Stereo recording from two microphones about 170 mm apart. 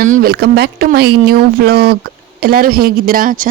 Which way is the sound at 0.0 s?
55° right (ahead or behind).